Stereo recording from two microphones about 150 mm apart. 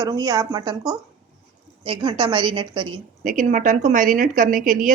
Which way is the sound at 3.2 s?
60° right (ahead or behind).